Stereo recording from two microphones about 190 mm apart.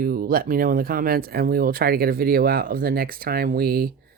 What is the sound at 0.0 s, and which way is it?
Speech, 50° right (ahead or behind).